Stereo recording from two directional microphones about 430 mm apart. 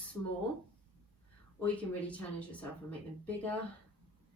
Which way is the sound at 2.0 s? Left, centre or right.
Centre.